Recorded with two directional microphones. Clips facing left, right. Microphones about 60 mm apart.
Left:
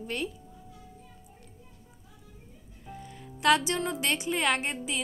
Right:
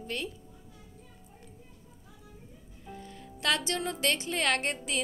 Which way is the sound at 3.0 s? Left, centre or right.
Left.